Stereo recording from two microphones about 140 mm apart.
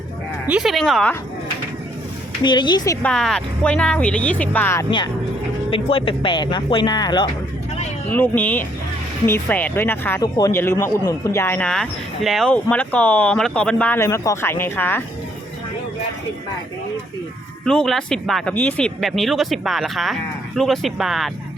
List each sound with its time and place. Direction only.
0.4 s speech: 5° right (ahead or behind)
2.4 s speech: 30° left (ahead or behind)
3.0 s speech: 5° left (ahead or behind)
5.7 s speech: 40° left (ahead or behind)
8.1 s speech: 10° left (ahead or behind)
17.7 s speech: 5° left (ahead or behind)